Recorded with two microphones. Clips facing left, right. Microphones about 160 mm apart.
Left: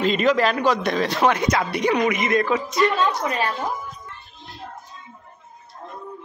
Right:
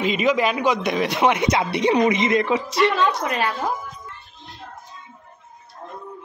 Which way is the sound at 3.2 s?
60° right (ahead or behind).